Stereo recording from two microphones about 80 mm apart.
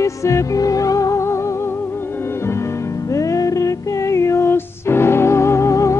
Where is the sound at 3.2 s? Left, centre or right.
Left.